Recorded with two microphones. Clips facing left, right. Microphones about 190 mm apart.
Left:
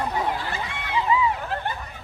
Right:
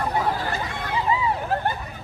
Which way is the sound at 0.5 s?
40° right (ahead or behind).